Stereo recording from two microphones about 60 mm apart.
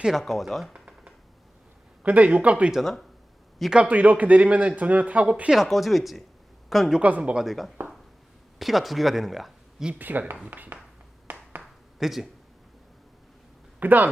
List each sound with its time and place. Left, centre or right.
0.0 s speech: centre
0.7 s computer keyboard: centre
2.0 s speech: right
3.8 s speech: right
5.5 s speech: centre
7.0 s speech: right
7.3 s speech: centre
10.0 s speech: right
11.3 s a sound: right
11.6 s a sound: centre
13.7 s speech: right